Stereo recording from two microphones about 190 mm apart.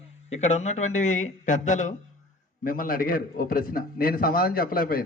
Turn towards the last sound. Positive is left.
turn(degrees=50)  # may be behind; listen again after turning